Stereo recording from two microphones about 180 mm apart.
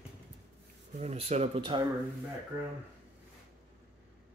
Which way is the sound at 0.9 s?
35° right (ahead or behind).